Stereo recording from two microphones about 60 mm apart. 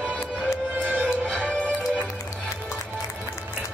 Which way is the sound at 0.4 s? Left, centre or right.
Right.